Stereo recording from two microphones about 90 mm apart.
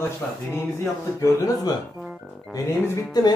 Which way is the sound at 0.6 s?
30° left (ahead or behind).